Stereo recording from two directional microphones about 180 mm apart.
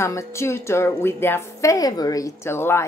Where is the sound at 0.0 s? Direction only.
15° left (ahead or behind).